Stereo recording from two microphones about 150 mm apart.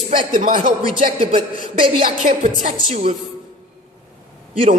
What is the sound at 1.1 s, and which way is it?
A man's voice, 35° right (ahead or behind).